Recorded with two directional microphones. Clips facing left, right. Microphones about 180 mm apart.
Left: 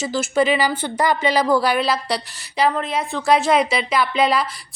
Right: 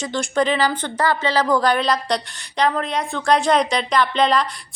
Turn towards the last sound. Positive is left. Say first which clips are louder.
# right 1 dB
turn(degrees=5)  # may be behind; listen again after turning